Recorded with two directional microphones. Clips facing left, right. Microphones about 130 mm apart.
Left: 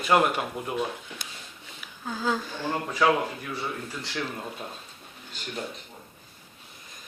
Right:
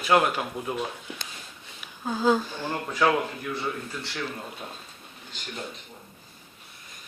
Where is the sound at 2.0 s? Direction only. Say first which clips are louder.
Right 6 dB; 20° right (ahead or behind).